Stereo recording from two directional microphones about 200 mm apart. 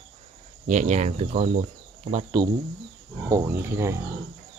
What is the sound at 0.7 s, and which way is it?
Speech, 40° right (ahead or behind).